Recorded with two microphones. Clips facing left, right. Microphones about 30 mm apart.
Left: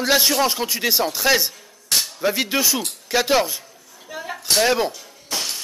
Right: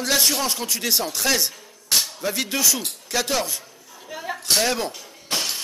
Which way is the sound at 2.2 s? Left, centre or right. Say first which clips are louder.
Left 3 dB; centre.